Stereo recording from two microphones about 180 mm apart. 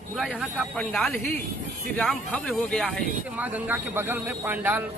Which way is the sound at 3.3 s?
10° right (ahead or behind).